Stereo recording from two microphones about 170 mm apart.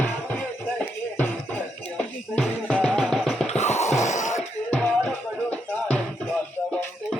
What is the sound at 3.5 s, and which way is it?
Music, 40° left (ahead or behind).